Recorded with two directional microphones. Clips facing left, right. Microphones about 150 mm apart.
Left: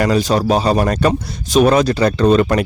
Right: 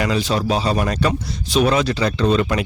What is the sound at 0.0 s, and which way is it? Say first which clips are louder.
A man's voice: left 5 dB; 45° left (ahead or behind).